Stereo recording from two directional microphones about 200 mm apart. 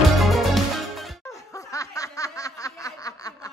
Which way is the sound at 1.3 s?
15° left (ahead or behind).